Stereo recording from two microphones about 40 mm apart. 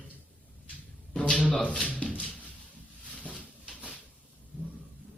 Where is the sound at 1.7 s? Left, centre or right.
Left.